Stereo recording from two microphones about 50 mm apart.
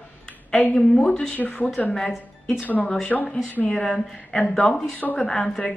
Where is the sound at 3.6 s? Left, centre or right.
Centre.